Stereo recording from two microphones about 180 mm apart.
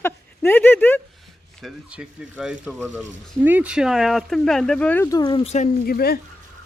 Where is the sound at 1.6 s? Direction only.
5° right (ahead or behind); by 5.7 s 35° left (ahead or behind).